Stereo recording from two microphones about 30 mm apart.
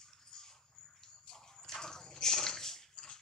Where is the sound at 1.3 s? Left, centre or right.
Centre.